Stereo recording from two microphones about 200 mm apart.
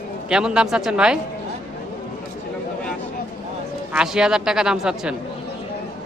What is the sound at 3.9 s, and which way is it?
A man's voice, 5° right (ahead or behind).